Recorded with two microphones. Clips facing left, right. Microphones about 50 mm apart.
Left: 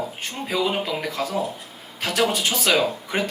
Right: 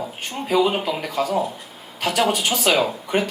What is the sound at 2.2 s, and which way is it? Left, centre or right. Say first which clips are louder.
Speech: right 1 dB; right.